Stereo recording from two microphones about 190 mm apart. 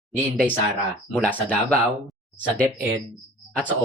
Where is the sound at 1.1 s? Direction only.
5° right (ahead or behind).